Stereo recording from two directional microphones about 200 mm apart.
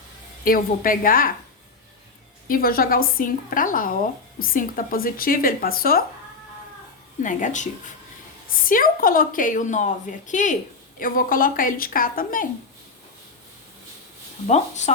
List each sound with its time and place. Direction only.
0.4 s speech: 45° left (ahead or behind)
2.5 s speech: 45° left (ahead or behind)
7.2 s a woman's voice: 40° left (ahead or behind)
14.4 s a woman's voice: 35° left (ahead or behind)